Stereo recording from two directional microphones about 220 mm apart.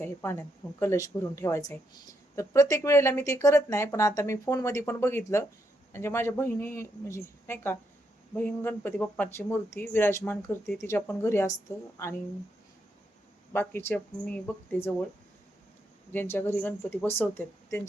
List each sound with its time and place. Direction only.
0.0 s speech: 10° left (ahead or behind)
13.5 s speech: 10° left (ahead or behind)
16.1 s speech: 10° left (ahead or behind)